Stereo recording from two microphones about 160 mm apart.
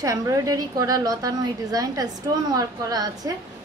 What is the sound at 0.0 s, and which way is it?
A woman's voice, 20° right (ahead or behind).